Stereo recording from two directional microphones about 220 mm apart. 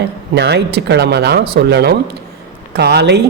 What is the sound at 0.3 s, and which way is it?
Speech, 50° right (ahead or behind).